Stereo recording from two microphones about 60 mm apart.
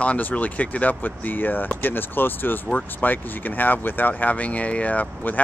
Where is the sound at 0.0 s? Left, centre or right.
Left.